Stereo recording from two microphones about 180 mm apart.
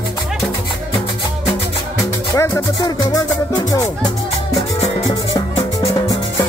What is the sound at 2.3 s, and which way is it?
Music, 15° left (ahead or behind).